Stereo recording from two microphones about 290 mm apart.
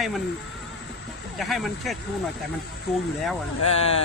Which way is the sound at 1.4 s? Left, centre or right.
Centre.